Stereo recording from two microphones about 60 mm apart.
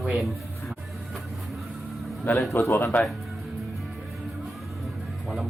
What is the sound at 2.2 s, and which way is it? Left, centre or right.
Speech, left.